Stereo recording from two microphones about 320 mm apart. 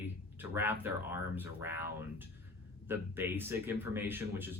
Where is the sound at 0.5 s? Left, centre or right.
Centre.